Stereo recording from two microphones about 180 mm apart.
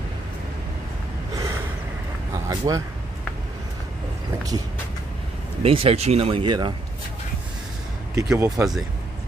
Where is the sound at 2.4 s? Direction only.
20° right (ahead or behind).